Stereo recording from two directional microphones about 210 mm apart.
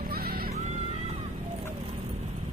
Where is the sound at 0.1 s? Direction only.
45° right (ahead or behind).